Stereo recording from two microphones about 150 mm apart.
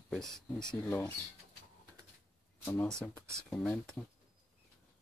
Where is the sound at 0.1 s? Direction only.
Centre (ahead or behind).